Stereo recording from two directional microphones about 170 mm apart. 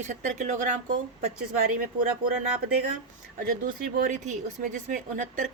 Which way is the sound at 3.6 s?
50° right (ahead or behind).